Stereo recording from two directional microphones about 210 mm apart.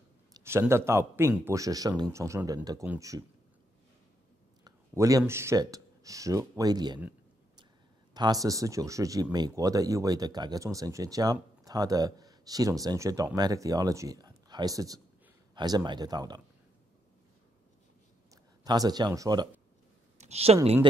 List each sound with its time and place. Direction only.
0.3 s speech: 10° right (ahead or behind)
4.6 s speech: 15° right (ahead or behind)
8.1 s speech: 20° right (ahead or behind)
18.3 s speech: 15° right (ahead or behind)
20.2 s a sound: 30° right (ahead or behind)